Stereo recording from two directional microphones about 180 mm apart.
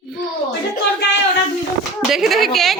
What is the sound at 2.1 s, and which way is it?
Speech, centre (ahead or behind).